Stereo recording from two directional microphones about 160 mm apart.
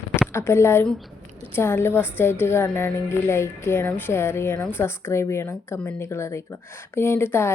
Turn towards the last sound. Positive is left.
turn(degrees=15)  # may be behind; listen again after turning